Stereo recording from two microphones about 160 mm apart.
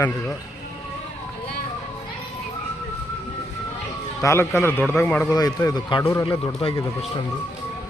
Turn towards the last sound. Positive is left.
turn(degrees=35)  # may be behind; listen again after turning